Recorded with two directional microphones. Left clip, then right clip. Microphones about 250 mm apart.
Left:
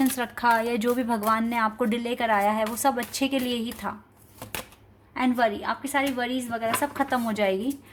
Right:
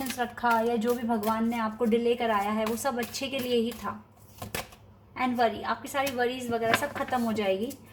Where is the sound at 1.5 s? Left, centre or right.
Left.